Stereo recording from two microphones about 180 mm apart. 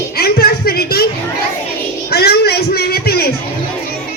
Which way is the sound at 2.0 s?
60° left (ahead or behind).